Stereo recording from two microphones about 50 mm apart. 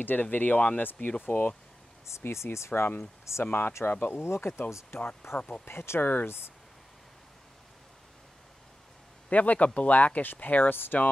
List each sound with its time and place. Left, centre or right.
0.0 s speech: left
2.0 s speech: left
3.3 s speech: left
3.8 s speech: left
4.1 s speech: left
4.4 s speech: left
4.9 s speech: left
5.7 s speech: left
9.3 s speech: left